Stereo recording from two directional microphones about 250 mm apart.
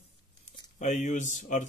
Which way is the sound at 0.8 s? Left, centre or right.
Left.